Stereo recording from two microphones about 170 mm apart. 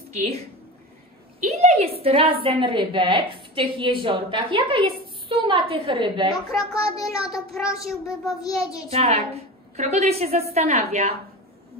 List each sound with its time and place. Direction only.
1.4 s a woman's voice: 40° right (ahead or behind)
6.3 s a child's voice: 20° left (ahead or behind)
8.9 s a woman's voice: 35° right (ahead or behind)